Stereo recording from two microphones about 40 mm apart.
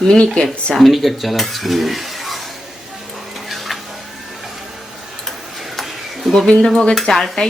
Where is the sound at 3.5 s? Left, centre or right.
Centre.